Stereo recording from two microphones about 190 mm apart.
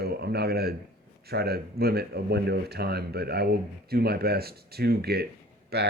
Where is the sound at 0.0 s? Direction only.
55° right (ahead or behind).